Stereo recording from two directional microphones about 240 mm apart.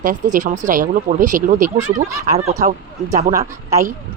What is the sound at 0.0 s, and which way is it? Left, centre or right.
Speech, right.